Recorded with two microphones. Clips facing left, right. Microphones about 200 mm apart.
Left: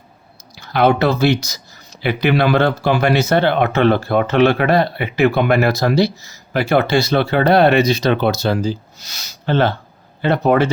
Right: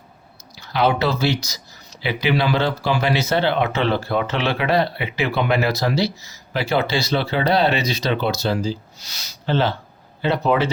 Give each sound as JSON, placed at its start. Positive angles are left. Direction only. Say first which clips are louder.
{"t": 0.5, "sound": "speech", "louder": "left 5 dB", "side_deg": 50}